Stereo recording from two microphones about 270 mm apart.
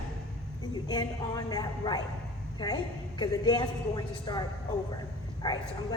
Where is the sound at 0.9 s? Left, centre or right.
Centre.